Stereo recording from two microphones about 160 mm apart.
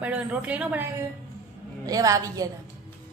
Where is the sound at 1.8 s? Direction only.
20° right (ahead or behind).